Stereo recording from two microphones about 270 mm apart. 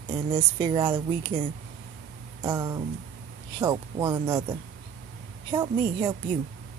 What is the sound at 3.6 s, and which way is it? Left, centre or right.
Speech, centre.